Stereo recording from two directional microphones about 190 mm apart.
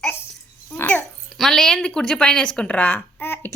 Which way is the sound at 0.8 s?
5° left (ahead or behind).